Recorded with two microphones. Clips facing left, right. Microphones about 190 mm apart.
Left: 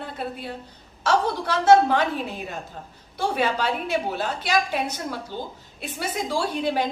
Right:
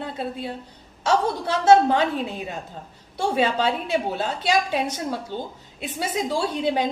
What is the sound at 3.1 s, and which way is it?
A woman's voice, 25° right (ahead or behind).